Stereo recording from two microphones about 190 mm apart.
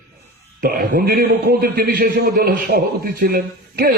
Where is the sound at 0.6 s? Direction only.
50° right (ahead or behind).